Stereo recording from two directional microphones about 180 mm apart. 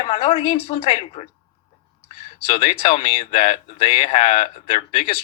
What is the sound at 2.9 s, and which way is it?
A woman's voice, 40° left (ahead or behind).